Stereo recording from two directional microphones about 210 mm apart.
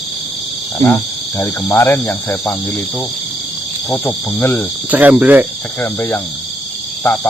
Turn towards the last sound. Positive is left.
turn(degrees=10)  # may be behind; listen again after turning